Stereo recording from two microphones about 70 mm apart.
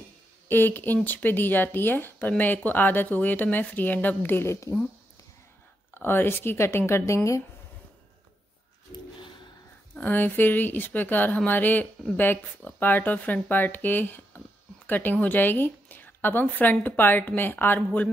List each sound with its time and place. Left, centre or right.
0.5 s speech: left
5.9 s speech: left
9.9 s speech: left